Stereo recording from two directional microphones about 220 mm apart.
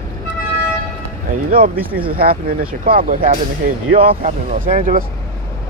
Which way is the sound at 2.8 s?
40° right (ahead or behind).